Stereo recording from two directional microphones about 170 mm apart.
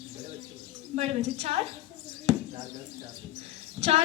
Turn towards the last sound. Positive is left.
turn(degrees=-40)  # may be behind; listen again after turning